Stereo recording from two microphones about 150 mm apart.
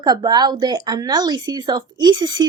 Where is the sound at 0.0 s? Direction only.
25° right (ahead or behind).